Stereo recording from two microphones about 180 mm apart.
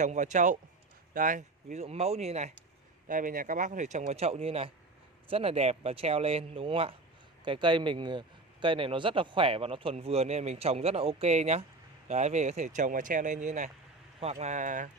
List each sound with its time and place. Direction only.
0.0 s a man's voice: 45° right (ahead or behind)
3.1 s a man's voice: 50° right (ahead or behind)